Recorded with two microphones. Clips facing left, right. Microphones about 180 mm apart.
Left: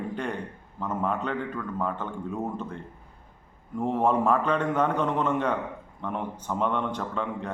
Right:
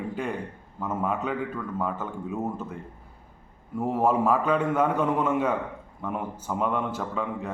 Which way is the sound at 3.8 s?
5° right (ahead or behind).